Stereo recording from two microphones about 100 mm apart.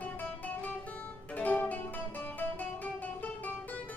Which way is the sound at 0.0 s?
15° left (ahead or behind).